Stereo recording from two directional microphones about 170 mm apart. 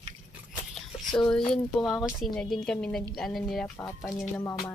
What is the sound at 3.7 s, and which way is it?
Speech, 15° left (ahead or behind).